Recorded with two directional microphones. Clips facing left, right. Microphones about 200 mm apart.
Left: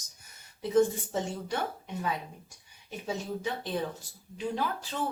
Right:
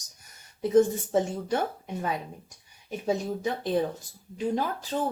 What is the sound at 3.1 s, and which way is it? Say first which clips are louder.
Speech: right 6 dB; 45° right (ahead or behind).